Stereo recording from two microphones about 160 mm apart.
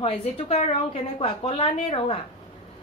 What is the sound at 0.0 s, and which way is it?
A woman's voice, 45° left (ahead or behind).